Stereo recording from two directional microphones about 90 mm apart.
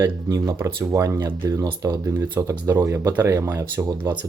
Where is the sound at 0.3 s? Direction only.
30° right (ahead or behind).